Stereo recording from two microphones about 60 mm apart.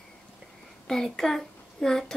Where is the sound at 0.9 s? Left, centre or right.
Centre.